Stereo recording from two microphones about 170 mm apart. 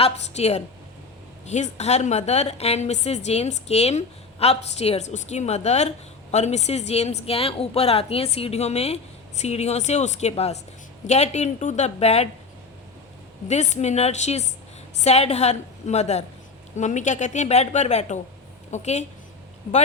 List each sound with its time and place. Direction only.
0.0 s a woman's voice: 40° left (ahead or behind)
13.5 s a woman's voice: 40° left (ahead or behind)